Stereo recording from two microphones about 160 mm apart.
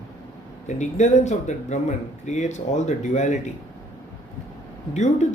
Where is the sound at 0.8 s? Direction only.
45° left (ahead or behind).